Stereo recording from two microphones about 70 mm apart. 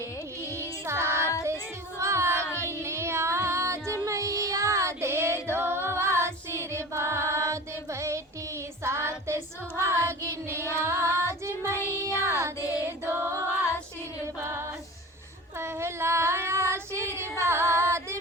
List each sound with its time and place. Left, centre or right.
0.5 s child singing: right
11.9 s music: right
12.5 s child singing: left
13.1 s music: right
15.5 s child singing: right